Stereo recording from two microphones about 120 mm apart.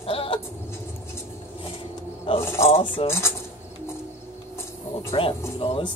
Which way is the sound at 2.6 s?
50° left (ahead or behind).